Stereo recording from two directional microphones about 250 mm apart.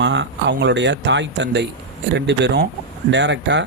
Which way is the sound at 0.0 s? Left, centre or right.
Right.